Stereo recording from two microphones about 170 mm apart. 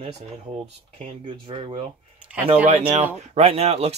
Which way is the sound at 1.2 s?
30° right (ahead or behind).